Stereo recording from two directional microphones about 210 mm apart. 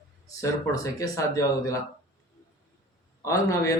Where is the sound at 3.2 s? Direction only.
15° left (ahead or behind).